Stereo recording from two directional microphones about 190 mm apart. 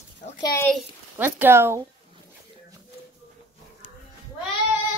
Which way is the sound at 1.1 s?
10° right (ahead or behind).